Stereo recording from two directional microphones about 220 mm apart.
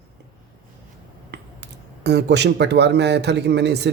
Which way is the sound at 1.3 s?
50° right (ahead or behind).